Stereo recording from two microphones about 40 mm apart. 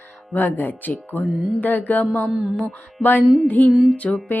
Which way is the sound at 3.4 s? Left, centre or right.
Left.